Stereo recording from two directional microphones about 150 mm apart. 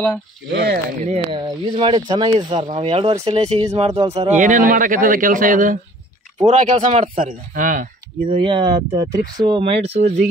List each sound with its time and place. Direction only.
0.5 s speech: 90° right
1.3 s speech: 35° right (ahead or behind)
2.3 s speech: 40° right (ahead or behind); by 7.9 s 60° right (ahead or behind)
8.3 s speech: 35° right (ahead or behind)